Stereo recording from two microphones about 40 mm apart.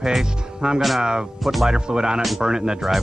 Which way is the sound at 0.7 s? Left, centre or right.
Centre.